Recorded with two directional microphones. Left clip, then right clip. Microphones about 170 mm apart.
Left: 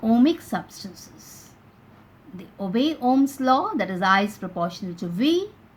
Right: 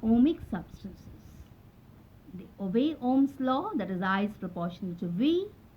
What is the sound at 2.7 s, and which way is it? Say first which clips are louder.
A woman's voice: left 6 dB; 40° left (ahead or behind).